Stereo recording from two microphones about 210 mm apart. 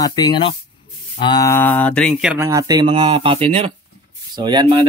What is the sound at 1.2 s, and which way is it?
Mantra, 20° left (ahead or behind).